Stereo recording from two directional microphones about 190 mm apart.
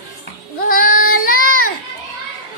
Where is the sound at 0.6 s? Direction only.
50° left (ahead or behind).